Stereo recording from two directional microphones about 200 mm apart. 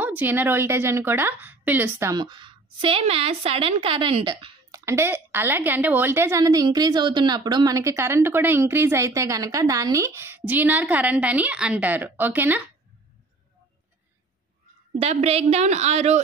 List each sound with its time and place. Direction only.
0.0 s a woman's voice: 10° right (ahead or behind)
15.0 s a woman's voice: 30° right (ahead or behind)